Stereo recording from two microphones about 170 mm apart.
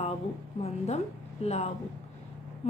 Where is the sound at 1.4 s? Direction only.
40° left (ahead or behind).